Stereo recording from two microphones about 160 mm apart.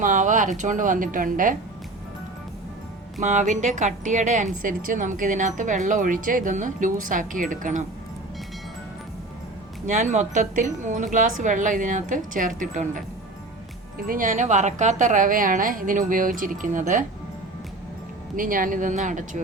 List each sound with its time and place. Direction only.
0.0 s a woman's voice: 55° right (ahead or behind)
3.2 s speech: 50° right (ahead or behind)
9.8 s speech: 50° right (ahead or behind)
14.1 s a woman's voice: 55° right (ahead or behind)
18.3 s speech: 60° right (ahead or behind)